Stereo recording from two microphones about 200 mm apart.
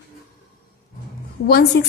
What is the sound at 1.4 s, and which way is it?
Speech, 55° left (ahead or behind).